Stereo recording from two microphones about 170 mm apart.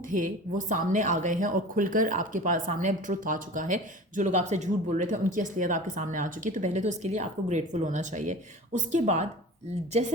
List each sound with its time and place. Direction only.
0.1 s a woman's voice: 50° right (ahead or behind)